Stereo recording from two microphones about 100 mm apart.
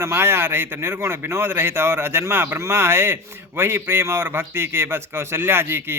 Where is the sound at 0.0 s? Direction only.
25° right (ahead or behind).